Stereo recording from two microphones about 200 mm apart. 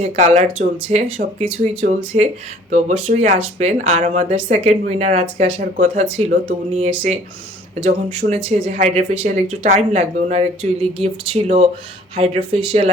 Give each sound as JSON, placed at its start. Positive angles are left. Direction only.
{"t": 0.0, "sound": "speech", "side_deg": -40}
{"t": 2.1, "sound": "speech", "side_deg": -35}